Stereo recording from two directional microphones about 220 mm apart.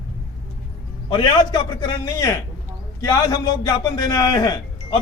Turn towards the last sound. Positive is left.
turn(degrees=20)  # may be behind; listen again after turning